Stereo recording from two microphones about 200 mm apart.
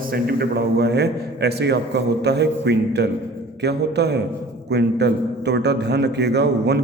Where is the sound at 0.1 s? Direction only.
50° right (ahead or behind).